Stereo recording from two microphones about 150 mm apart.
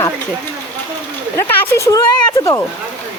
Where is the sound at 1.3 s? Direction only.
15° left (ahead or behind).